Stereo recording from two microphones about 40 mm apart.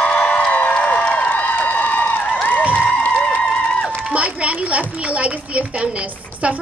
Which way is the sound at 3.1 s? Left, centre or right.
Left.